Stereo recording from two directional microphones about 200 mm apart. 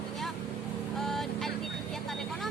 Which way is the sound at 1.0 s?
Centre (ahead or behind).